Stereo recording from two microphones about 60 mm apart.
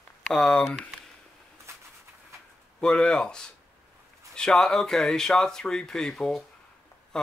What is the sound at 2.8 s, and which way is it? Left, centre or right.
Speech, centre.